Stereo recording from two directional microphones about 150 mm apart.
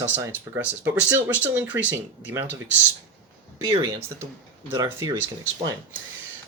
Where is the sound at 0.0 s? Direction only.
15° right (ahead or behind).